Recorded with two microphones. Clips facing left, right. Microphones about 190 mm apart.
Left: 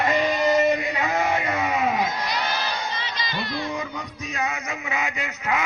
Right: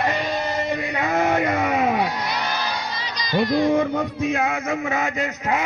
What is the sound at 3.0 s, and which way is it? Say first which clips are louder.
Music: right 8 dB; 40° right (ahead or behind).